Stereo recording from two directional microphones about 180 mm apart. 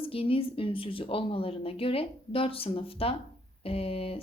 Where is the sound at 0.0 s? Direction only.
30° left (ahead or behind).